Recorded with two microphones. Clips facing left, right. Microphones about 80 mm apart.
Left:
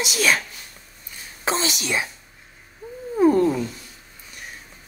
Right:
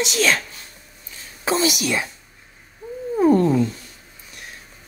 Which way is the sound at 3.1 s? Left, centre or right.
Centre.